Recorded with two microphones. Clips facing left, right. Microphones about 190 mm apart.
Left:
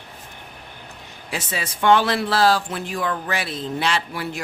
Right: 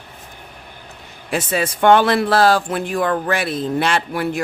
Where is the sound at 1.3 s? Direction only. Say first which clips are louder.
Right 9 dB; 55° right (ahead or behind).